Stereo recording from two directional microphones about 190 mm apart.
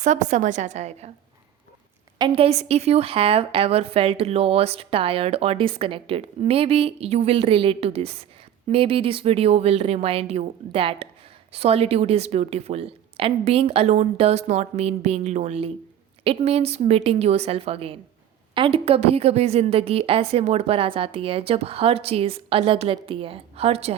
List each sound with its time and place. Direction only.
0.0 s a woman's voice: 40° right (ahead or behind)
2.1 s a woman's voice: 25° right (ahead or behind)